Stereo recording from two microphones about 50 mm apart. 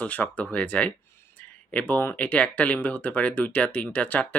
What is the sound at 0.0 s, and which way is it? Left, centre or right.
Speech, left.